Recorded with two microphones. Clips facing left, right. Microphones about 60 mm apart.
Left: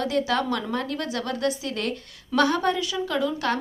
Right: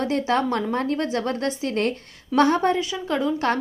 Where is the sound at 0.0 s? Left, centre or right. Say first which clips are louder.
Right 2 dB; right.